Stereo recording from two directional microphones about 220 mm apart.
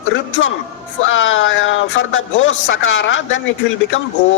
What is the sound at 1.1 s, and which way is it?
A woman's voice, 60° left (ahead or behind).